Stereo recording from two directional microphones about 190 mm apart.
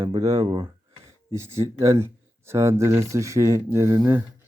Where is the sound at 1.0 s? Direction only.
15° right (ahead or behind).